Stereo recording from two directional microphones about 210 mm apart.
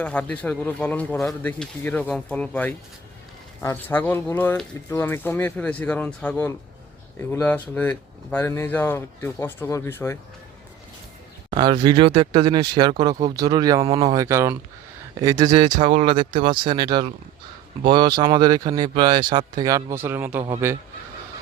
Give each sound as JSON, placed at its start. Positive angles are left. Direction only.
{"t": 0.0, "sound": "speech", "side_deg": 5}
{"t": 11.5, "sound": "speech", "side_deg": -20}